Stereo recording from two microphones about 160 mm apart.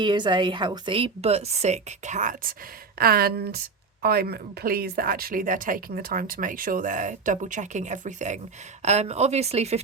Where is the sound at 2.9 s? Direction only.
70° right (ahead or behind).